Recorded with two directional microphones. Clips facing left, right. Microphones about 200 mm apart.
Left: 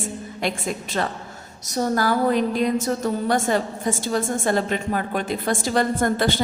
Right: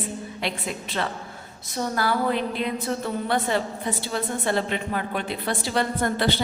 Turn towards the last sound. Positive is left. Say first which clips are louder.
# left 3 dB
turn(degrees=45)  # may be behind; listen again after turning